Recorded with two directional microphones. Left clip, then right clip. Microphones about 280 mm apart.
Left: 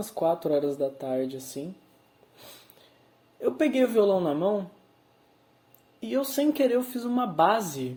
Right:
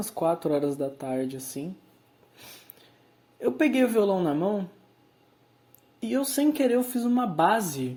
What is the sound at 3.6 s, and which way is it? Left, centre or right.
Speech, right.